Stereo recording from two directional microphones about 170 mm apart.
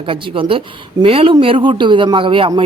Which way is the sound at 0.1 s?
30° right (ahead or behind).